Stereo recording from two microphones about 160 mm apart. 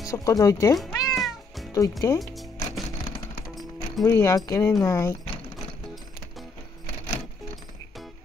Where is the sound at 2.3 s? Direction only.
Centre (ahead or behind).